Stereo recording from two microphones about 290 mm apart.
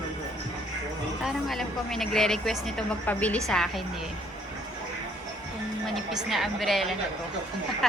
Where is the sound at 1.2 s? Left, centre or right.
Centre.